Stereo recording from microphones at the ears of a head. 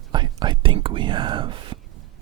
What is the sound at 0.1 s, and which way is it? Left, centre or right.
Speech, right.